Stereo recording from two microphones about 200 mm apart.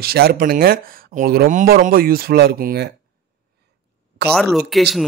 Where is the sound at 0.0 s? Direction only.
50° right (ahead or behind).